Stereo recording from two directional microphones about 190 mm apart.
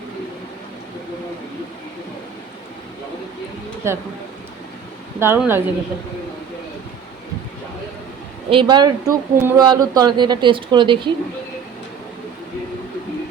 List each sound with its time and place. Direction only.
3.8 s a woman's voice: 15° right (ahead or behind)
5.2 s a woman's voice: 10° right (ahead or behind)
8.4 s a man's voice: 25° right (ahead or behind)